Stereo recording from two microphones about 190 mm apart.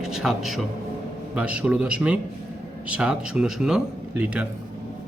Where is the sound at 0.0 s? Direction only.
Centre (ahead or behind).